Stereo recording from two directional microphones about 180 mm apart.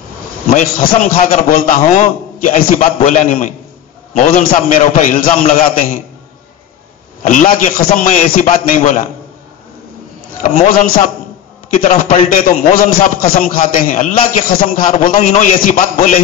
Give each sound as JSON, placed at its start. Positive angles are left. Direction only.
{"t": 0.5, "sound": "a man's voice", "side_deg": 50}
{"t": 7.2, "sound": "a man's voice", "side_deg": 50}
{"t": 10.7, "sound": "a man's voice", "side_deg": 50}